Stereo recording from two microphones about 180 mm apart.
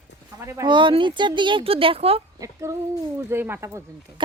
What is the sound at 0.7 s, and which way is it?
Speech, 25° right (ahead or behind).